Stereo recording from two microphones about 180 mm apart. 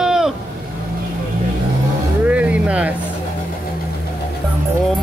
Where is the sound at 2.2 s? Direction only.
5° right (ahead or behind).